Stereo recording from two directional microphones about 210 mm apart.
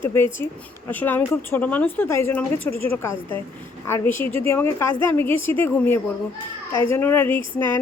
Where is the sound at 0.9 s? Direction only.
10° left (ahead or behind).